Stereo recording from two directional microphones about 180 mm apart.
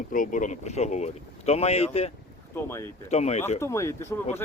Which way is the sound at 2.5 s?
15° left (ahead or behind).